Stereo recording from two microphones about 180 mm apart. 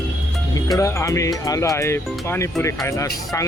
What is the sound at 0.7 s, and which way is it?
Speech, 15° left (ahead or behind).